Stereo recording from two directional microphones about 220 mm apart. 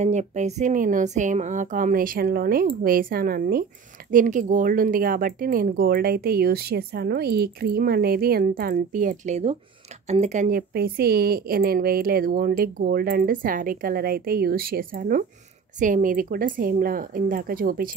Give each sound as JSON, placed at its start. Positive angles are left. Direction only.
{"t": 0.0, "sound": "speech", "side_deg": -30}
{"t": 10.7, "sound": "speech", "side_deg": -45}